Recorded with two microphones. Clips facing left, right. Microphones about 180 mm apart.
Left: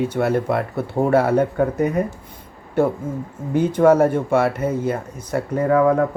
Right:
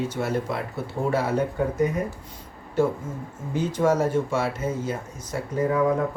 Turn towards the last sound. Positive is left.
turn(degrees=65)  # may be behind; listen again after turning